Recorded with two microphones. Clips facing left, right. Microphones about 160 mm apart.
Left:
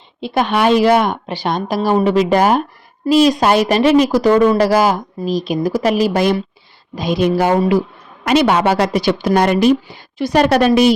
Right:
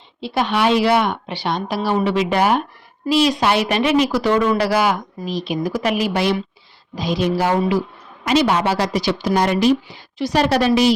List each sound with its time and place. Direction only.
0.2 s a woman's voice: 50° left (ahead or behind)
6.9 s a woman's voice: 55° left (ahead or behind)